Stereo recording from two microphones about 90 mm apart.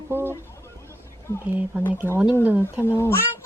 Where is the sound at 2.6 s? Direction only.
25° left (ahead or behind).